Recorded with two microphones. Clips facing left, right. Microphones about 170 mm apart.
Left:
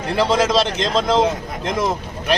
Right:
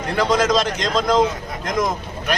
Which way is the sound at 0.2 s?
30° left (ahead or behind).